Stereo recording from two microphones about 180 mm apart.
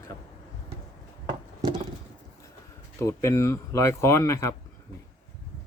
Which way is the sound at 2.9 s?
15° left (ahead or behind).